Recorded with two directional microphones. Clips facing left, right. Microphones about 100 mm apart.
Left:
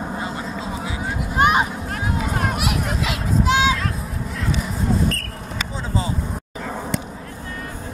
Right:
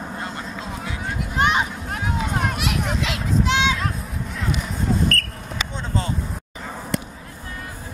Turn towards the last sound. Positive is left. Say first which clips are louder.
# even
turn(degrees=0)  # may be behind; listen again after turning